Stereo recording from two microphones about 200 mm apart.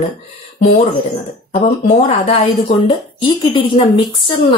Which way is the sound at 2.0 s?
30° left (ahead or behind).